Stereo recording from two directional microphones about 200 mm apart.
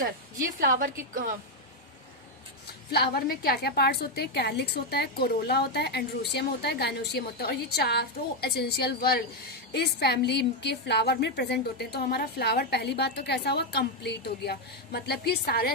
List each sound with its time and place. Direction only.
0.0 s a woman's voice: 45° right (ahead or behind)
2.9 s a woman's voice: 50° left (ahead or behind)